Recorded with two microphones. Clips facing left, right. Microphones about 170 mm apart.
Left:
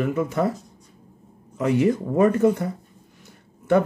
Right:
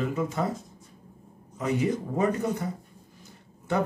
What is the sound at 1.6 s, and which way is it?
Speech, 65° left (ahead or behind).